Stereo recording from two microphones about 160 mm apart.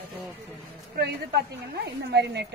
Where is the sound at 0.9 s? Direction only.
80° right.